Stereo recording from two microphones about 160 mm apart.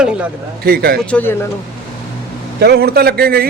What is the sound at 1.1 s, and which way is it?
Speech, 15° left (ahead or behind).